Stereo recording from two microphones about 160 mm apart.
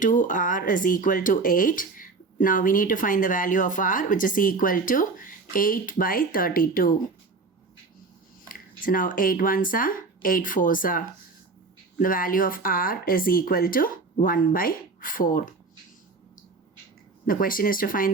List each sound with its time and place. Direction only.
0.0 s speech: 55° left (ahead or behind)
8.4 s speech: 60° left (ahead or behind)
17.2 s speech: 60° left (ahead or behind)